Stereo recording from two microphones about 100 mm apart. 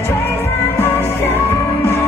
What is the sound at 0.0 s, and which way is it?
Music, 25° left (ahead or behind).